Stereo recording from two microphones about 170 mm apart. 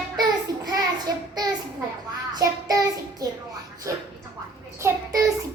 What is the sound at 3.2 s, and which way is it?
Music, 20° right (ahead or behind).